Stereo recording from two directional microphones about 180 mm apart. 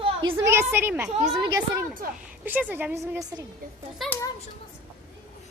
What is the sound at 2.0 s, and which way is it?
Speech, 55° right (ahead or behind).